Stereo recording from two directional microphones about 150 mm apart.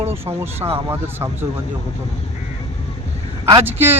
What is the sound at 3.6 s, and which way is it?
Speech, 15° right (ahead or behind).